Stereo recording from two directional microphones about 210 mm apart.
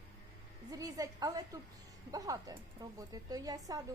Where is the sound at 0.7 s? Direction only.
15° right (ahead or behind).